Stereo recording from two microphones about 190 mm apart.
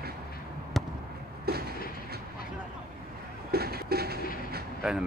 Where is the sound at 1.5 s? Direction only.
55° right (ahead or behind).